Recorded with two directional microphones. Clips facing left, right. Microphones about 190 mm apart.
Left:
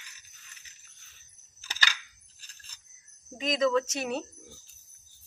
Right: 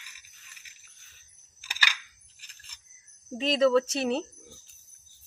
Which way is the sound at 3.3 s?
30° right (ahead or behind).